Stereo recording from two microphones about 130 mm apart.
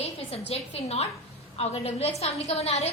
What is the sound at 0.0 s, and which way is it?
A woman's voice, 50° left (ahead or behind).